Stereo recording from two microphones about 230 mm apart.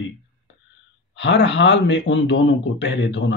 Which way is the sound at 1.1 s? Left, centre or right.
Left.